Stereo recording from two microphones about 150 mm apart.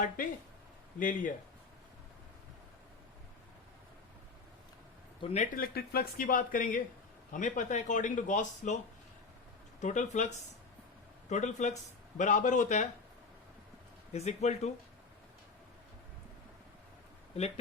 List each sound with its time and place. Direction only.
0.9 s speech: 60° left (ahead or behind)
5.2 s speech: 45° left (ahead or behind)
5.5 s speech: 85° left; by 8.8 s 55° left (ahead or behind)
9.8 s speech: 55° left (ahead or behind)
14.1 s speech: 45° left (ahead or behind)